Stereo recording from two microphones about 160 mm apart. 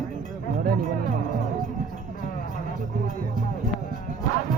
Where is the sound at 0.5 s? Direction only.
60° right (ahead or behind).